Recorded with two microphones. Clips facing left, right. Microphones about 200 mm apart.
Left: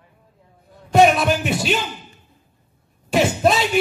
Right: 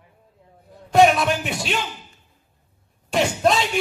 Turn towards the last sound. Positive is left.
turn(degrees=5)  # may be behind; listen again after turning